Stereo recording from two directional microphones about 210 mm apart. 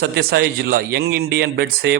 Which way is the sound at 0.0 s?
50° right (ahead or behind).